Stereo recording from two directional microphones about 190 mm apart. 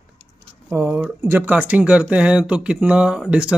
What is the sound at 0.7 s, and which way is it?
Speech, 10° right (ahead or behind).